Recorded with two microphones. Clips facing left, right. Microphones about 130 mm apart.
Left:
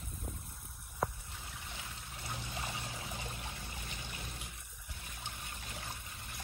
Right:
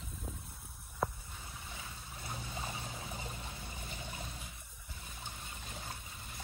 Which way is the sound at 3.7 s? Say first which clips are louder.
Right 1 dB; 70° left (ahead or behind).